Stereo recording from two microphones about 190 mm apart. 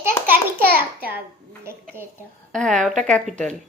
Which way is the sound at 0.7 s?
10° right (ahead or behind).